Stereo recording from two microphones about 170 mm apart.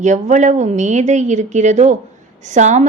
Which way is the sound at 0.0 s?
45° right (ahead or behind).